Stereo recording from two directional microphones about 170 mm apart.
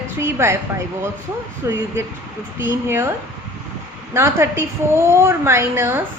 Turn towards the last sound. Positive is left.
turn(degrees=-15)  # may be behind; listen again after turning